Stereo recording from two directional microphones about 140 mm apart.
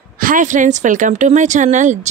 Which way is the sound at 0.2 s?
70° right (ahead or behind).